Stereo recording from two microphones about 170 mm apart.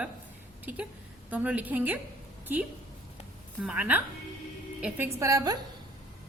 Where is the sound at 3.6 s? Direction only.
10° right (ahead or behind).